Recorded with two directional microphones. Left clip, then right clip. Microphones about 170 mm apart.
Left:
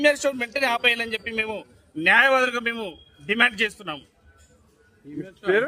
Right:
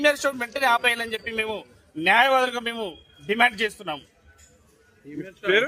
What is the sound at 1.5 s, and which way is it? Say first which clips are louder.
A man's voice: right 1 dB; centre (ahead or behind).